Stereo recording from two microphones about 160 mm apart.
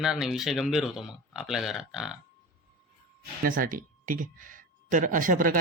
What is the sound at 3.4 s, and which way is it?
Speech, 60° right (ahead or behind).